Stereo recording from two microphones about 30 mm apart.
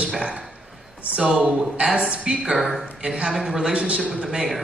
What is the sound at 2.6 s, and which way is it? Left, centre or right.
Speech, centre.